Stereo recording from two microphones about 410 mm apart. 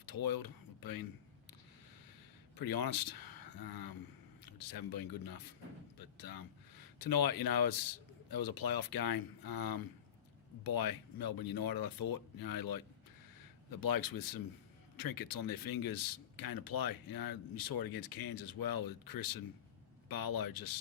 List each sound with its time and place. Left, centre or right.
0.0 s speech: left
2.6 s speech: left
13.8 s speech: left